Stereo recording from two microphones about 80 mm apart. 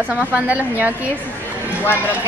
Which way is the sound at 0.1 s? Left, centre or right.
Centre.